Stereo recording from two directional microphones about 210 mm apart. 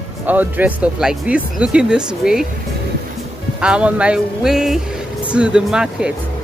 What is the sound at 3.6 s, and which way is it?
Speech, 5° right (ahead or behind).